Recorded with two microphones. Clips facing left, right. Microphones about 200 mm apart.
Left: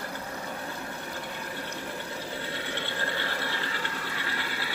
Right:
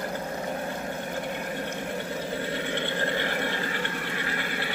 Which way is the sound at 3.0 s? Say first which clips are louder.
Right 5 dB; 15° right (ahead or behind).